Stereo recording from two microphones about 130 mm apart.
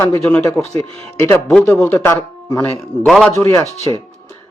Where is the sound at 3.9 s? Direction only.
30° left (ahead or behind).